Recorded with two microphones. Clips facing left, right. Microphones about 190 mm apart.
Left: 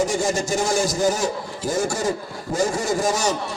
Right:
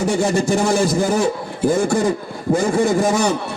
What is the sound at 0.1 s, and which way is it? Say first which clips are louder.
A man's voice: right 5 dB; 60° right (ahead or behind).